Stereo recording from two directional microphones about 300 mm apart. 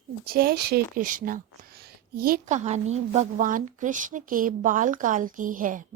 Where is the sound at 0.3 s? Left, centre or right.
Right.